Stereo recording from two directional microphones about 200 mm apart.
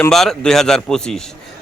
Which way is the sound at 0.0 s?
Centre (ahead or behind).